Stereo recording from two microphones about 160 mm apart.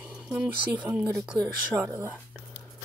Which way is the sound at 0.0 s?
5° right (ahead or behind).